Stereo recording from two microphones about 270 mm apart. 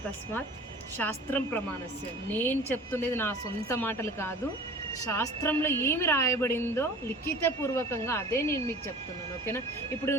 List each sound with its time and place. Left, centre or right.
0.9 s a woman's voice: centre
10.1 s a woman's voice: centre